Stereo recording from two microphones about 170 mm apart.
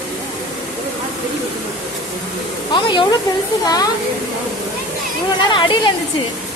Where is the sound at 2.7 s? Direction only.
25° left (ahead or behind).